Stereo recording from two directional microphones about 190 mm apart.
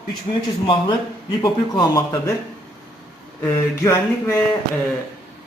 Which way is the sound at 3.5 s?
15° left (ahead or behind).